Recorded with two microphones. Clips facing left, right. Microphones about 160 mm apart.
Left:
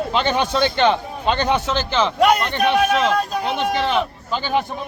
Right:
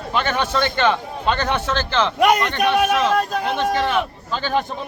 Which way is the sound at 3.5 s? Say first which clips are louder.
Even; 20° left (ahead or behind).